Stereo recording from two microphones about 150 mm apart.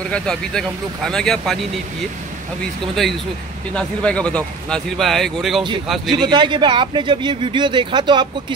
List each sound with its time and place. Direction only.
0.1 s a man's voice: 5° left (ahead or behind)
2.6 s a man's voice: centre (ahead or behind)
6.2 s speech: 30° right (ahead or behind)